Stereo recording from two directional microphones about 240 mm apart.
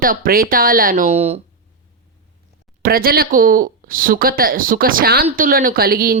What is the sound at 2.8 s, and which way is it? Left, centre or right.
Speech, right.